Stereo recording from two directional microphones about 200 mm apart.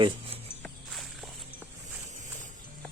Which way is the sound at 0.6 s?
Centre (ahead or behind).